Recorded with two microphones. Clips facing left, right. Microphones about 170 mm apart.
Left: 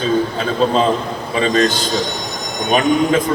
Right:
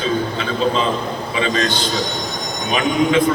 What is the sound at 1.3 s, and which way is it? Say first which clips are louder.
A man's voice: left 5 dB; 40° left (ahead or behind).